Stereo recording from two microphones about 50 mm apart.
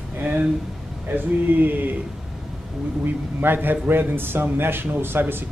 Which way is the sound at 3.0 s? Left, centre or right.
Right.